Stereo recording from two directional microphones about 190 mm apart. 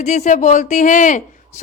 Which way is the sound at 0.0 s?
40° left (ahead or behind).